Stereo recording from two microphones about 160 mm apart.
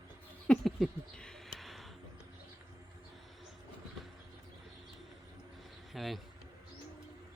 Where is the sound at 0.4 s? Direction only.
5° left (ahead or behind).